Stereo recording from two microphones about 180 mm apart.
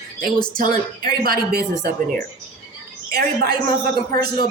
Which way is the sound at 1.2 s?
55° right (ahead or behind).